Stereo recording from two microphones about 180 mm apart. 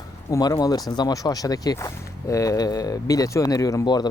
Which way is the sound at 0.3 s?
20° left (ahead or behind).